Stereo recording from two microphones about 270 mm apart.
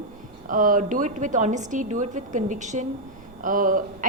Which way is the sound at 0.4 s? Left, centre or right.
Right.